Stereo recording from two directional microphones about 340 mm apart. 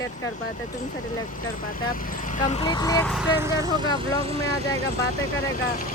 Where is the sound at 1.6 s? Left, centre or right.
Left; by 4.8 s centre.